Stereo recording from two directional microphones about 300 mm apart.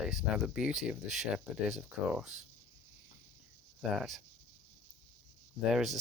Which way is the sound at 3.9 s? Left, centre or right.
Centre.